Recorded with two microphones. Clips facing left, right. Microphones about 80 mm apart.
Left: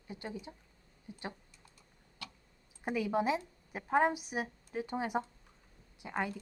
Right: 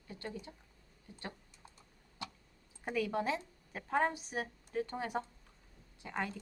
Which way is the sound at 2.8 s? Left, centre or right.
Centre.